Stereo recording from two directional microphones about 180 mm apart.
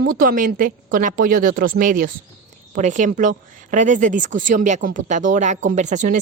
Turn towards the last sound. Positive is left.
turn(degrees=-40)  # may be behind; listen again after turning